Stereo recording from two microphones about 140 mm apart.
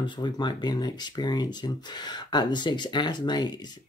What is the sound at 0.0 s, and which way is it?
Speech, 35° left (ahead or behind).